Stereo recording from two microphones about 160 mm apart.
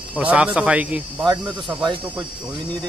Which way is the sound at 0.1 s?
5° right (ahead or behind).